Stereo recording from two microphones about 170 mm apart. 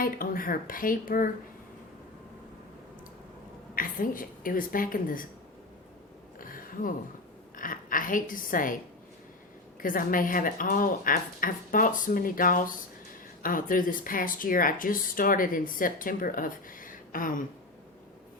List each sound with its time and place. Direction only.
0.0 s speech: 55° left (ahead or behind)
3.8 s speech: 55° left (ahead or behind)
6.4 s a sound: 55° left (ahead or behind)
7.5 s a woman's voice: 55° left (ahead or behind)
9.8 s speech: 55° left (ahead or behind)